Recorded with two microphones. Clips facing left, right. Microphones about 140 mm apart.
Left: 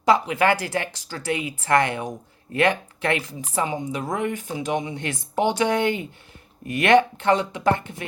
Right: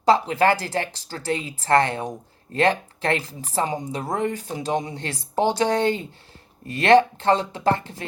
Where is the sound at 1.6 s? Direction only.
30° right (ahead or behind).